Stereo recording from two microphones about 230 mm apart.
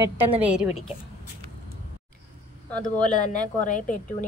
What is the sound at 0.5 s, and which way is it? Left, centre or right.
Speech, centre.